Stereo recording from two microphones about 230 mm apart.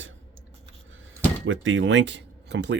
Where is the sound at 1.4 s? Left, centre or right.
Right.